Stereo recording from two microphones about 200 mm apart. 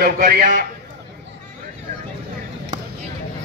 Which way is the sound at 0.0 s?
50° right (ahead or behind).